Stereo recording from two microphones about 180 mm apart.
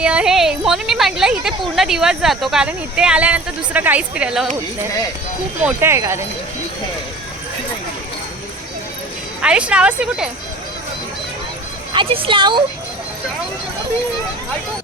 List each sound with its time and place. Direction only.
0.0 s speech: 5° right (ahead or behind)
5.6 s speech: 15° right (ahead or behind)
9.4 s speech: 5° right (ahead or behind)
11.9 s speech: 30° right (ahead or behind)